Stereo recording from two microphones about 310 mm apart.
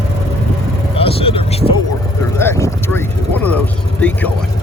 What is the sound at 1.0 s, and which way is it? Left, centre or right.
Vehicle, centre.